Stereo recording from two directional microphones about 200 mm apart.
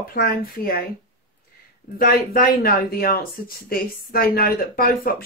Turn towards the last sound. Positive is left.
turn(degrees=45)  # may be behind; listen again after turning